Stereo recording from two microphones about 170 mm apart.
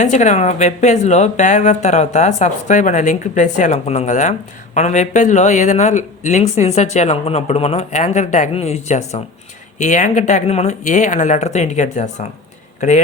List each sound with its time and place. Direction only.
0.0 s a woman's voice: 45° left (ahead or behind)